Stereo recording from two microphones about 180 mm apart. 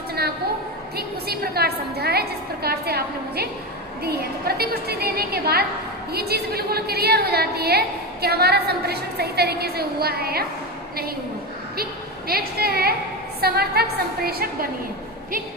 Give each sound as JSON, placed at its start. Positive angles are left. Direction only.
{"t": 0.9, "sound": "a woman's voice", "side_deg": -60}
{"t": 12.3, "sound": "a woman's voice", "side_deg": -60}